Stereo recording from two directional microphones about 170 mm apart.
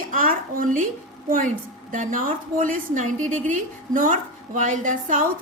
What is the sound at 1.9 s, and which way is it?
A woman's voice, 50° right (ahead or behind).